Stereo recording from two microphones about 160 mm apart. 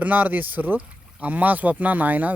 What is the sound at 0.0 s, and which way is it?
Speech, 10° right (ahead or behind).